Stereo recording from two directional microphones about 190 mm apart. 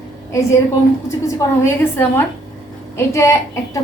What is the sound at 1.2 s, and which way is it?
A woman's voice, 10° left (ahead or behind).